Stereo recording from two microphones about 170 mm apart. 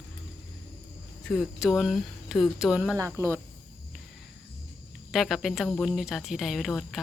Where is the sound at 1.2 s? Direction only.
5° right (ahead or behind).